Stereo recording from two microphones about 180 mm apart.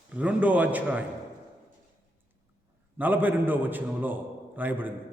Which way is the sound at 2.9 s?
10° right (ahead or behind).